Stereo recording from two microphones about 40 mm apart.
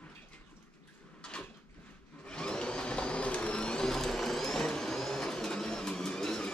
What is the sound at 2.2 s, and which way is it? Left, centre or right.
Vacuum cleaner, left.